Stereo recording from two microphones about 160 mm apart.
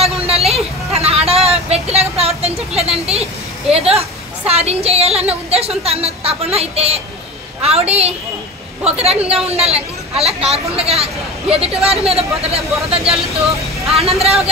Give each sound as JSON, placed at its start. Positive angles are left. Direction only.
{"t": 0.3, "sound": "vehicle", "side_deg": -40}
{"t": 3.7, "sound": "a sound", "side_deg": -40}
{"t": 7.6, "sound": "a woman's voice", "side_deg": -40}